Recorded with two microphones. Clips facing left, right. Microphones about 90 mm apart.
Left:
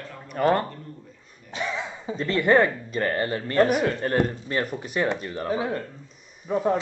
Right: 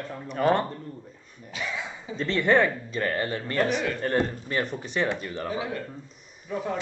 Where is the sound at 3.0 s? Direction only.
30° left (ahead or behind).